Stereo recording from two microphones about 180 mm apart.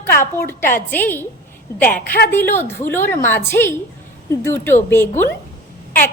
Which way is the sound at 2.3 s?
10° left (ahead or behind).